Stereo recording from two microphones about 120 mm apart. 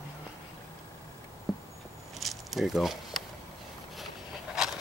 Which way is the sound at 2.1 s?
Centre (ahead or behind).